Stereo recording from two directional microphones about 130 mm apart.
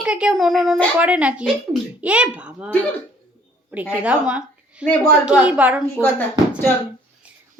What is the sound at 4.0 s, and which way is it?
A woman's voice, 10° right (ahead or behind).